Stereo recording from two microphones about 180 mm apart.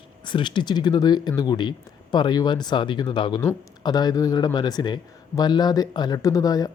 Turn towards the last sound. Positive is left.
turn(degrees=20)  # may be behind; listen again after turning